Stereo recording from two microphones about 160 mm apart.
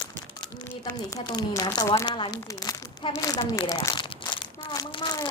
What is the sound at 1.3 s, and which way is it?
Speech, 25° left (ahead or behind).